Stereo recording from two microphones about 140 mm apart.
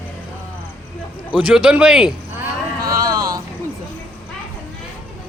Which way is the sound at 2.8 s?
25° right (ahead or behind).